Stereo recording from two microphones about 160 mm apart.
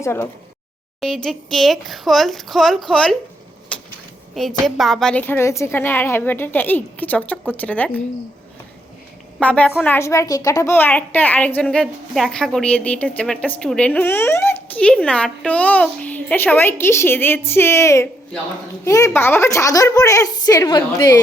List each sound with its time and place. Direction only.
0.0 s a woman's voice: 15° left (ahead or behind)
1.0 s speech: centre (ahead or behind)
3.7 s vehicle: 5° left (ahead or behind)
4.6 s a woman's voice: centre (ahead or behind)
9.4 s a woman's voice: 10° left (ahead or behind); by 21.1 s 25° left (ahead or behind)